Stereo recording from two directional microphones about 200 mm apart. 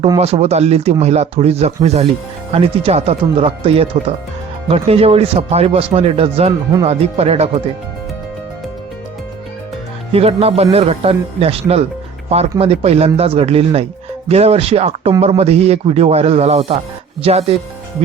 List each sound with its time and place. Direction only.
0.2 s speech: 30° right (ahead or behind)
10.1 s speech: 30° right (ahead or behind)